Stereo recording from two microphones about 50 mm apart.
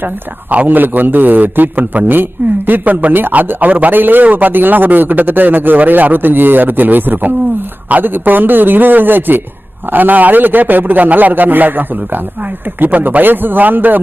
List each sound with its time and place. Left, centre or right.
0.5 s a man's voice: right